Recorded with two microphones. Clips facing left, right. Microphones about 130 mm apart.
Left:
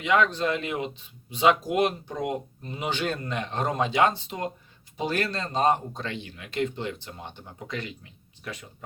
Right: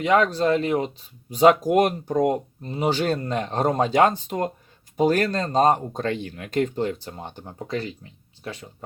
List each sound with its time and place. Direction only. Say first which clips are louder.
0.0 s speech: right 4 dB; 40° right (ahead or behind)